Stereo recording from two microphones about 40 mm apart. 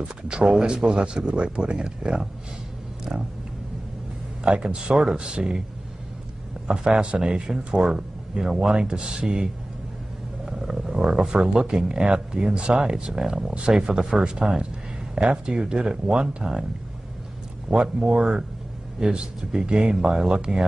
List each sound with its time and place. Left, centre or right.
0.0 s speech: right
4.5 s speech: right
6.7 s speech: right
10.4 s speech: centre
17.7 s speech: centre